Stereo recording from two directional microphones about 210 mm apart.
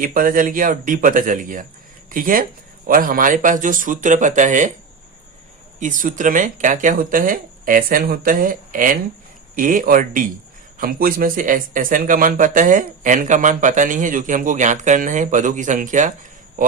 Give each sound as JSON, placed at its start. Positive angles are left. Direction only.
{"t": 0.0, "sound": "speech", "side_deg": -40}
{"t": 5.8, "sound": "speech", "side_deg": -40}